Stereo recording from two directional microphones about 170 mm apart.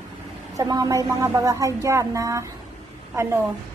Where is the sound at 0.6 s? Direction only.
20° right (ahead or behind).